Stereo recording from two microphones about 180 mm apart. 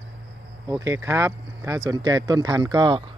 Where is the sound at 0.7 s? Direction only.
15° right (ahead or behind).